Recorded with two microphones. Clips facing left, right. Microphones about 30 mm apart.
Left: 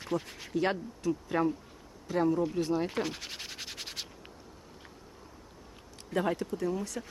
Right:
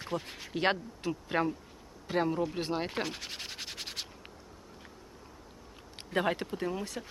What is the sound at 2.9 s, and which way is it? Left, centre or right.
Scratch, centre.